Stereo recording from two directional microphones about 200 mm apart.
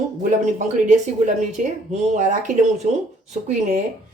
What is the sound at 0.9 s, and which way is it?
Speech, 35° right (ahead or behind).